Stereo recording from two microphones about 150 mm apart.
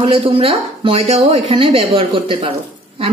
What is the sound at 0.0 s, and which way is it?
Speech, 35° right (ahead or behind).